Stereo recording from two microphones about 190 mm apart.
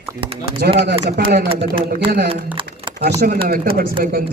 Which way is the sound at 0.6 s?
55° right (ahead or behind).